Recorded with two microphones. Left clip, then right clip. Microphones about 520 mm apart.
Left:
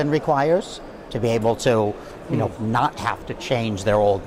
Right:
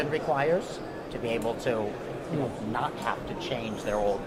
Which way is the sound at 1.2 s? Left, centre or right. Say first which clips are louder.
Left 10 dB; right.